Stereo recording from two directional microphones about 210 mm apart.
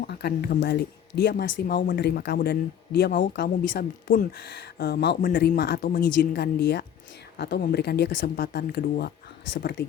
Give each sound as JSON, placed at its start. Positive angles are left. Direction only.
{"t": 0.1, "sound": "speech", "side_deg": 50}